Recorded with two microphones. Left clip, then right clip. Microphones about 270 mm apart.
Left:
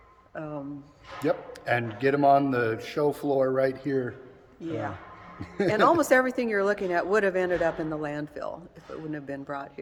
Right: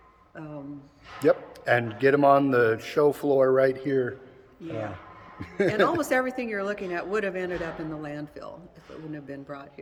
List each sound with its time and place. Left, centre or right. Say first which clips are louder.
0.3 s a woman's voice: left 5 dB; centre
1.2 s speech: right 5 dB; centre
5.4 s a man's voice: right 2 dB; centre
5.9 s a woman's voice: left 4 dB; centre